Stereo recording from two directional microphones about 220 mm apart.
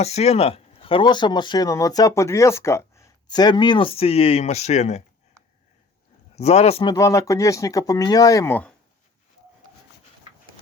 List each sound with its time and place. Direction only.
0.0 s speech: 30° left (ahead or behind)
6.3 s speech: 30° left (ahead or behind)
6.9 s speech: 15° left (ahead or behind)